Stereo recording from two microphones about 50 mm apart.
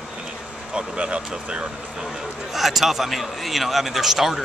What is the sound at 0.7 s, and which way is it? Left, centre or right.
Speech, right.